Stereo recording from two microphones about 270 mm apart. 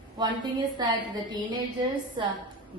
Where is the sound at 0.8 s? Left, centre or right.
Centre.